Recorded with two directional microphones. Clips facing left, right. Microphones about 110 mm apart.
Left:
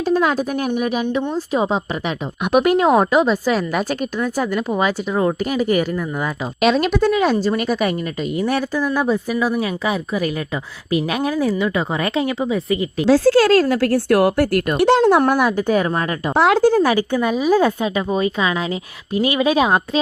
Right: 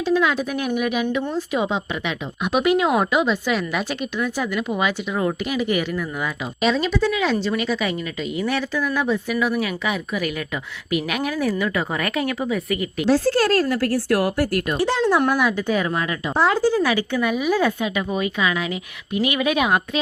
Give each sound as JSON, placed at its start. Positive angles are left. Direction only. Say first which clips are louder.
{"t": 0.0, "sound": "a woman's voice", "louder": "left 2 dB", "side_deg": 45}
{"t": 6.6, "sound": "a woman's voice", "louder": "left 4 dB", "side_deg": 70}
{"t": 13.1, "sound": "speech", "louder": "left 7 dB", "side_deg": 90}
{"t": 15.2, "sound": "speech", "louder": "left 3 dB", "side_deg": 45}
{"t": 16.3, "sound": "speech", "louder": "left 5 dB", "side_deg": 80}
{"t": 16.8, "sound": "a woman's voice", "louder": "left 4 dB", "side_deg": 40}
{"t": 17.2, "sound": "a woman's voice", "louder": "left 4 dB", "side_deg": 30}